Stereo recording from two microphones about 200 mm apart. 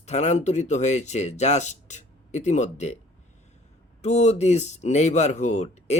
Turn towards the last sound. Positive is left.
turn(degrees=35)  # may be behind; listen again after turning